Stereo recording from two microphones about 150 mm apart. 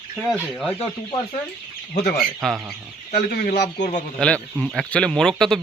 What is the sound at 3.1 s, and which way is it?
Speech, 65° left (ahead or behind).